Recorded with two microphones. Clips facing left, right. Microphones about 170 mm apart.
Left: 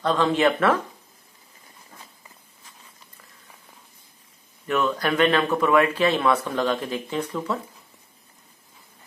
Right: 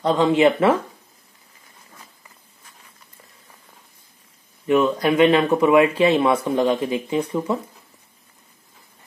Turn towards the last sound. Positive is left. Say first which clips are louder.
# right 5 dB
turn(degrees=-20)  # may be behind; listen again after turning